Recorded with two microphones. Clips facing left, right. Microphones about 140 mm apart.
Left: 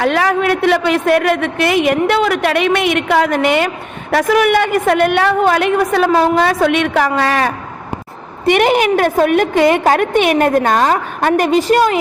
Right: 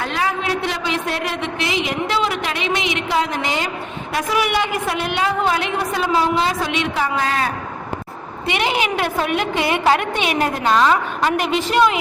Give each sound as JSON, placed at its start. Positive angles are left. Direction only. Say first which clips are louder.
{"t": 0.0, "sound": "a woman's voice", "louder": "left 8 dB", "side_deg": 80}
{"t": 6.1, "sound": "a woman's voice", "louder": "left 6 dB", "side_deg": 45}
{"t": 8.4, "sound": "a woman's voice", "louder": "left 9 dB", "side_deg": 50}